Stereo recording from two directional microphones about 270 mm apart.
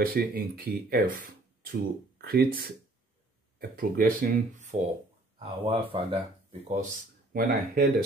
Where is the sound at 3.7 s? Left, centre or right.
Right.